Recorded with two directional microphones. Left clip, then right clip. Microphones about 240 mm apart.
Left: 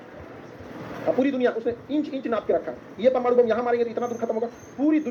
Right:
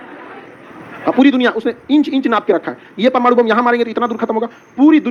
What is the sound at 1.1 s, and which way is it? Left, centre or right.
Speech, right.